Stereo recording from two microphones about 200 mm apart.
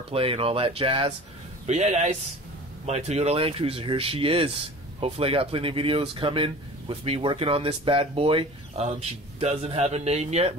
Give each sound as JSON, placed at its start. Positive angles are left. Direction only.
{"t": 0.1, "sound": "speech", "side_deg": -30}